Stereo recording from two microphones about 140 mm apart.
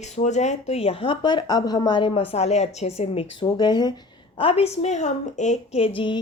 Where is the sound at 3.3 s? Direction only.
30° left (ahead or behind).